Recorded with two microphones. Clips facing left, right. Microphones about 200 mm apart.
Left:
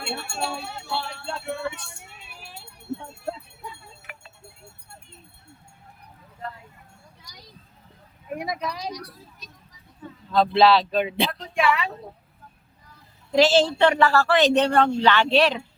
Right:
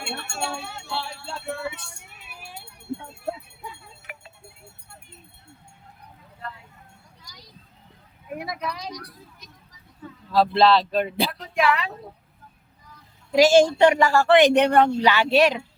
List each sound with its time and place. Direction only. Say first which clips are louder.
0.1 s speech: left 1 dB; 5° left (ahead or behind)
1.1 s music: left 1 dB; 5° right (ahead or behind)
8.4 s vehicle: left 2 dB; 25° left (ahead or behind)
10.3 s speech: even; 5° right (ahead or behind)
13.3 s speech: right 3 dB; 10° right (ahead or behind)